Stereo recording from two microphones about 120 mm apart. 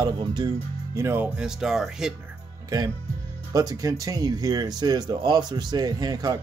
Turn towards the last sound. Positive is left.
turn(degrees=-35)  # may be behind; listen again after turning